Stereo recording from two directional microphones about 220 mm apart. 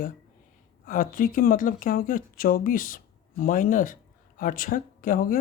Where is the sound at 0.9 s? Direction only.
40° left (ahead or behind).